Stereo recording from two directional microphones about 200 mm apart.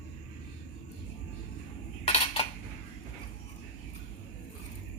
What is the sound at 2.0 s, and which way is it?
Cutlery, 30° left (ahead or behind).